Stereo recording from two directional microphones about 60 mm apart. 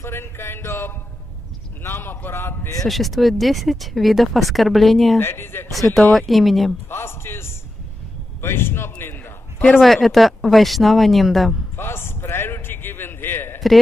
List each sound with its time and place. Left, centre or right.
0.0 s a sound: left
1.8 s a man's voice: left
2.8 s speech: centre
5.2 s a man's voice: left
5.9 s speech: centre
6.9 s a sound: left
8.4 s a man's voice: left
9.8 s speech: centre
11.7 s a sound: left